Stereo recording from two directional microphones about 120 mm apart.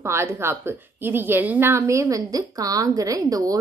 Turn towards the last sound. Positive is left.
turn(degrees=-30)  # may be behind; listen again after turning